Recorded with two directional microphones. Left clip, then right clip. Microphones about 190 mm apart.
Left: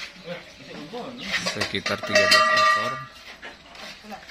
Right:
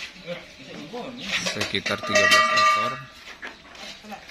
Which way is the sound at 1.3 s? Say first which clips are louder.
Even; centre (ahead or behind).